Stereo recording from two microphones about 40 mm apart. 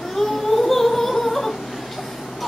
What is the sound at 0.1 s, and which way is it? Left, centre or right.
Singing, centre.